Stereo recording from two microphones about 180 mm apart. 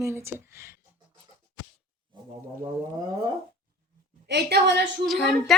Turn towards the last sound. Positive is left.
turn(degrees=0)  # may be behind; listen again after turning